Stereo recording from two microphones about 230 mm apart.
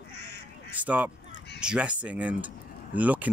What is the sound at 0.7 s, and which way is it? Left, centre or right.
Speech, centre.